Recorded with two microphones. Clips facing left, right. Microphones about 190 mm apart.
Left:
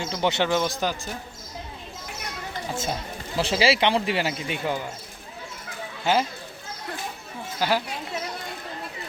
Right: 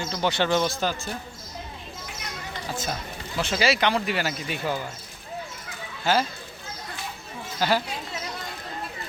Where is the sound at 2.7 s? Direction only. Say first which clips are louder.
Left 1 dB; 25° left (ahead or behind).